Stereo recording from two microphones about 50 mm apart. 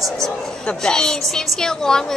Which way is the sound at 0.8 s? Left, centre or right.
Centre.